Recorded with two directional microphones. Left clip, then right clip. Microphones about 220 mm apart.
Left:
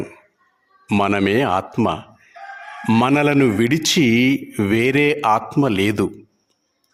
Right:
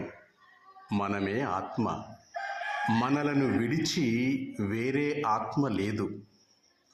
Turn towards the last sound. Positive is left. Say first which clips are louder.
# left 13 dB
turn(degrees=45)  # may be behind; listen again after turning